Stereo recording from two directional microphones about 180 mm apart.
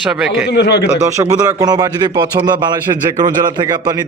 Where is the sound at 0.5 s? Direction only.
70° left (ahead or behind).